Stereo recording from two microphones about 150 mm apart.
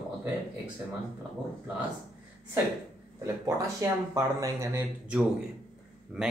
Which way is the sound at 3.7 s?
20° right (ahead or behind).